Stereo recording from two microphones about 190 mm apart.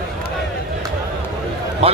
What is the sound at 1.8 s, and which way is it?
Speech, 30° right (ahead or behind).